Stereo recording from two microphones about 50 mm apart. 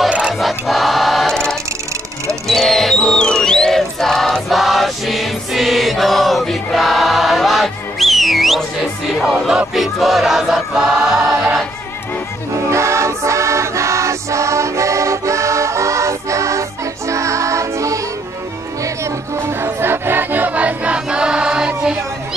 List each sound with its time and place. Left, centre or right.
0.3 s choir: centre
1.3 s music: centre
4.5 s chant: centre
9.2 s music: centre
12.7 s music: right
19.0 s music: right; by 21.9 s centre